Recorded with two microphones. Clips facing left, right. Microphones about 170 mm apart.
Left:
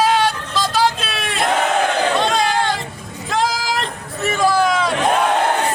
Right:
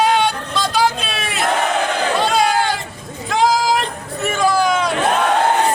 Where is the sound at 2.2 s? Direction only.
5° right (ahead or behind).